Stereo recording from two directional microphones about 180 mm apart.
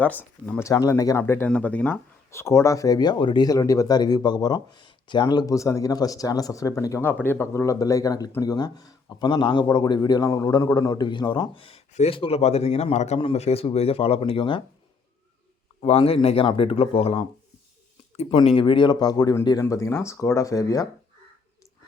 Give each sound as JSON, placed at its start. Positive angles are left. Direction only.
{"t": 0.0, "sound": "speech", "side_deg": 10}
{"t": 0.7, "sound": "speech", "side_deg": 20}
{"t": 15.8, "sound": "speech", "side_deg": 35}